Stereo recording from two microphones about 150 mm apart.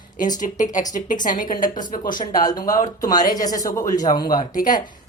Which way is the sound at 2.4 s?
25° left (ahead or behind).